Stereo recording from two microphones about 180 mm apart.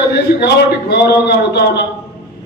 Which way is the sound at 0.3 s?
65° left (ahead or behind).